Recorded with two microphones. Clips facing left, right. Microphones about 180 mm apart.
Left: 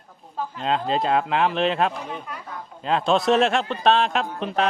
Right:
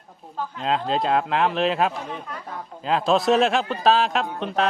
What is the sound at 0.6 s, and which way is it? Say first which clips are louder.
A man's voice: even; centre (ahead or behind).